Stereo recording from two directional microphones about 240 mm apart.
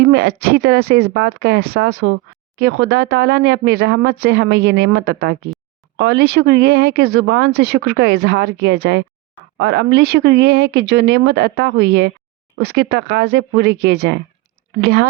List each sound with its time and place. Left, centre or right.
0.0 s speech: right